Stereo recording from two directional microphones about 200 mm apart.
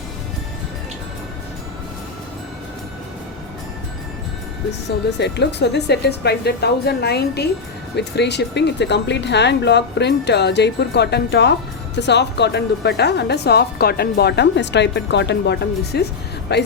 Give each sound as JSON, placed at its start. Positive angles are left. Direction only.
{"t": 4.9, "sound": "speech", "side_deg": 60}